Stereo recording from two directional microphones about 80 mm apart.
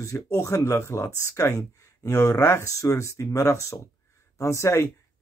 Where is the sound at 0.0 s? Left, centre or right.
Left.